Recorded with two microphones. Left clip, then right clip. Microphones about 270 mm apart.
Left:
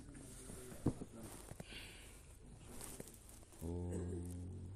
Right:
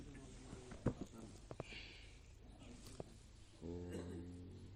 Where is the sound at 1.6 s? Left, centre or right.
Left.